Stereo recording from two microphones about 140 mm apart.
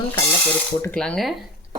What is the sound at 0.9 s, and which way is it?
Speech, 5° left (ahead or behind).